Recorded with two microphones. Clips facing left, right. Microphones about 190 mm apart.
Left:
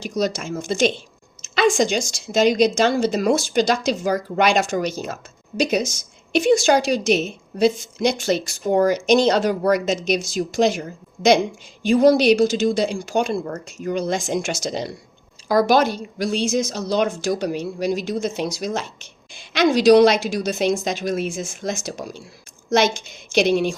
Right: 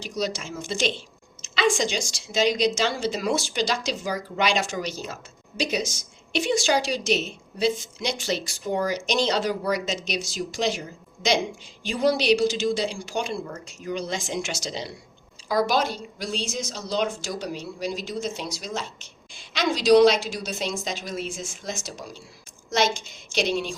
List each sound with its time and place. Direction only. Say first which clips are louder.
0.0 s a woman's voice: left 6 dB; 50° left (ahead or behind)
16.9 s speech: left 6 dB; 75° left (ahead or behind)
17.4 s speech: left 7 dB; 55° left (ahead or behind)
18.1 s a woman's voice: left 7 dB; 45° left (ahead or behind)
19.9 s a woman's voice: left 2 dB; 45° left (ahead or behind)
23.3 s speech: left 8 dB; 55° left (ahead or behind)